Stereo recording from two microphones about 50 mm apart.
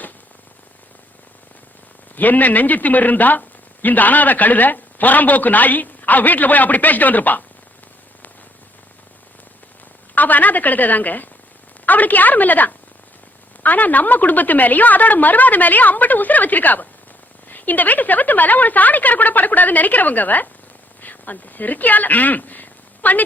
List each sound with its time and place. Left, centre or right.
2.1 s speech: left
10.2 s speech: left